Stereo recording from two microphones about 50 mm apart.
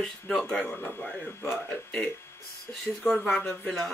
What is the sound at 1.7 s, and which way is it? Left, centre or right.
Speech, left.